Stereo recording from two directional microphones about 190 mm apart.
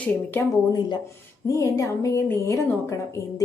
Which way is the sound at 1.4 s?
15° left (ahead or behind).